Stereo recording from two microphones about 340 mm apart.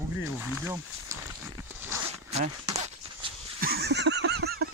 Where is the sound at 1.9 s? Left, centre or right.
Centre.